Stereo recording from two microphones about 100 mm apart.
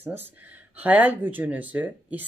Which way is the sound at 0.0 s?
20° right (ahead or behind).